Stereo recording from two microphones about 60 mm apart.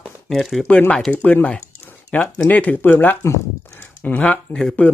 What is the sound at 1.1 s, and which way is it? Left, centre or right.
Speech, left.